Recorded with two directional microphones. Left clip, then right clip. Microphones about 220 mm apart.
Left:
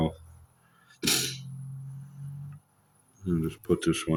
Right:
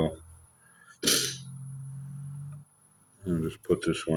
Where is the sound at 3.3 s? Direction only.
40° left (ahead or behind).